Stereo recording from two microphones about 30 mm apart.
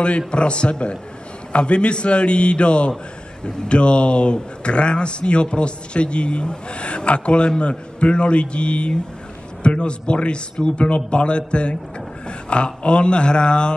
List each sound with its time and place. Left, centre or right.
0.3 s speech: left